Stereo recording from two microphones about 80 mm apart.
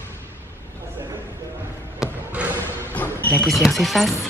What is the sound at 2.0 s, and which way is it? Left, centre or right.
Basketball bounce, centre.